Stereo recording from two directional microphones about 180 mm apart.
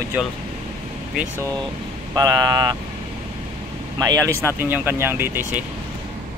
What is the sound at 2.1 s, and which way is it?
Speech, 20° right (ahead or behind).